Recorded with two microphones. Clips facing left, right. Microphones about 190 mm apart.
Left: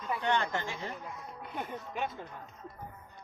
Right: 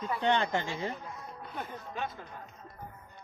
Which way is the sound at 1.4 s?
15° left (ahead or behind).